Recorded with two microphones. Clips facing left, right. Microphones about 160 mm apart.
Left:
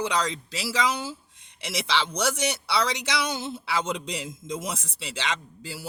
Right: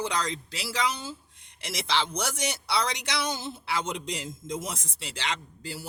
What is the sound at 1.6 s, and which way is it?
Speech, 65° left (ahead or behind).